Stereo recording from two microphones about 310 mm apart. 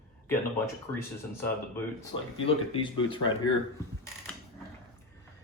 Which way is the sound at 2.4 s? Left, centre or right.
Centre.